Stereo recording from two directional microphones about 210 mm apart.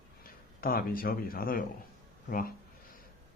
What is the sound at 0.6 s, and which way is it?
Speech, 45° left (ahead or behind).